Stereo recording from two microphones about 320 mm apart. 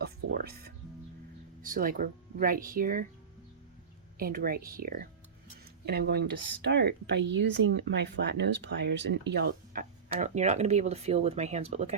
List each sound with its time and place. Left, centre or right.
0.0 s music: right
1.6 s speech: right
4.2 s speech: right